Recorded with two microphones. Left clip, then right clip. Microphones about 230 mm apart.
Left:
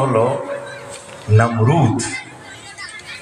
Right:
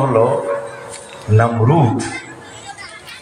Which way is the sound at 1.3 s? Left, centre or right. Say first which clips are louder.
Right 1 dB; left.